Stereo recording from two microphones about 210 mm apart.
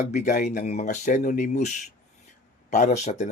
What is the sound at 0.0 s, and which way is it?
Speech, 35° left (ahead or behind).